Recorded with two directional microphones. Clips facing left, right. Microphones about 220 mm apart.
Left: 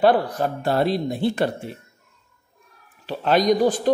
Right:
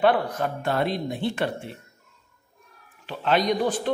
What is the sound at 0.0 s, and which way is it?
Speech, 35° left (ahead or behind).